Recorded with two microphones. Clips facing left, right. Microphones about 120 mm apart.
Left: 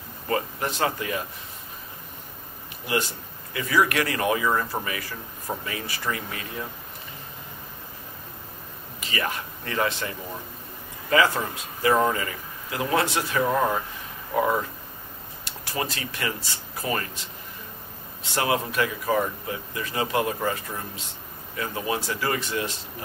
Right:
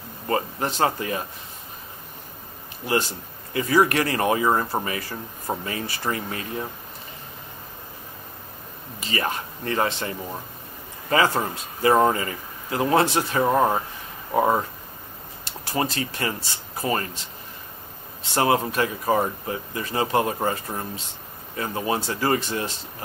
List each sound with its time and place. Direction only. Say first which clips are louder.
0.3 s speech: right 2 dB; 30° right (ahead or behind)
3.5 s speech: right 3 dB; 35° right (ahead or behind)
9.0 s speech: right 2 dB; 30° right (ahead or behind)
18.3 s speech: right 4 dB; 35° right (ahead or behind)